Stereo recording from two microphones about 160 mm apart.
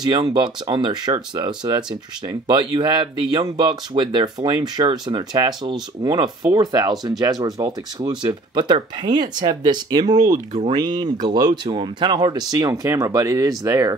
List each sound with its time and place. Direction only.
0.0 s speech: 25° right (ahead or behind)